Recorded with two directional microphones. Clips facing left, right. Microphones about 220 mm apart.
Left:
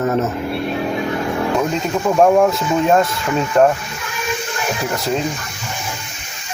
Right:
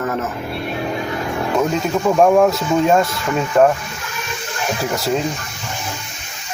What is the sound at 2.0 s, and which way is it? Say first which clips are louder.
Speech: even; centre (ahead or behind).